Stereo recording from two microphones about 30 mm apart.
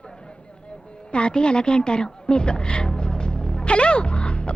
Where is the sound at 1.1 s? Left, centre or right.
Left.